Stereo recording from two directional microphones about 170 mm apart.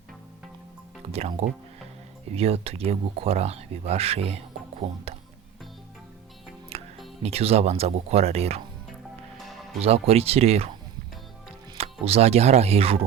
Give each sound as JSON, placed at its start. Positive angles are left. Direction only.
{"t": 1.1, "sound": "speech", "side_deg": -35}
{"t": 6.7, "sound": "music", "side_deg": -35}
{"t": 7.2, "sound": "speech", "side_deg": -35}
{"t": 9.8, "sound": "speech", "side_deg": -35}
{"t": 11.7, "sound": "speech", "side_deg": -35}